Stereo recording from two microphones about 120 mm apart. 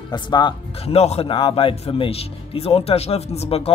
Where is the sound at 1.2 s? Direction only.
50° left (ahead or behind).